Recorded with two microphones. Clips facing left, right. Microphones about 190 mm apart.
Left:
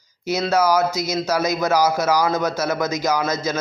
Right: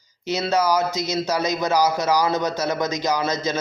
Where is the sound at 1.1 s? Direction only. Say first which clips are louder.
Left 1 dB; 15° right (ahead or behind).